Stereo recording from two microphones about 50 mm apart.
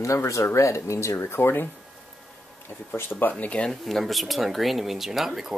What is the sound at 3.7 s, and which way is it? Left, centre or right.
Speech, centre.